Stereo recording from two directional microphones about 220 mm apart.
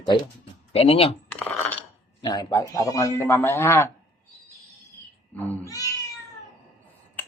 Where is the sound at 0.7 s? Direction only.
25° left (ahead or behind).